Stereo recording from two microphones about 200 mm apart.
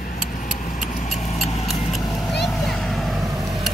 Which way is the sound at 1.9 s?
Centre (ahead or behind).